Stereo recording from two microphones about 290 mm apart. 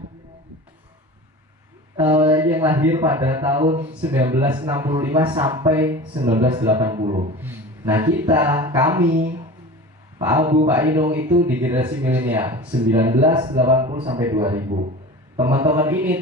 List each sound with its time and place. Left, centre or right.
2.0 s speech: centre
7.3 s speech: centre
10.1 s speech: centre